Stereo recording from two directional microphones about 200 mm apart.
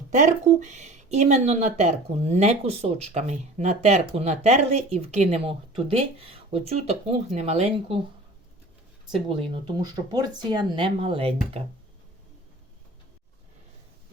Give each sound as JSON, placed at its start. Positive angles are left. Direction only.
{"t": 0.1, "sound": "speech", "side_deg": -35}
{"t": 9.4, "sound": "speech", "side_deg": -25}